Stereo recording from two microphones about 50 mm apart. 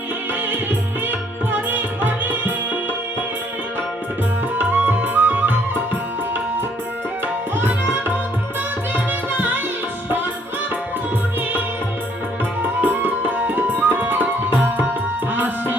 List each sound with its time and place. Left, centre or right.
0.4 s music: right
4.5 s music: right
7.5 s tabla: right
8.9 s music: right
12.6 s tabla: right
15.3 s music: right